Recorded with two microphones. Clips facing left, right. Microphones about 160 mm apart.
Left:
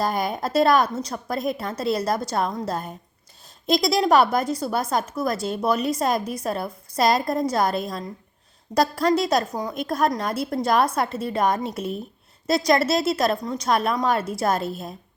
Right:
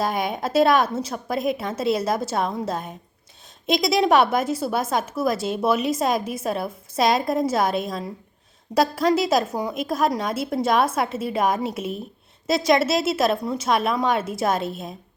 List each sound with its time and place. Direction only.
0.0 s a woman's voice: centre (ahead or behind)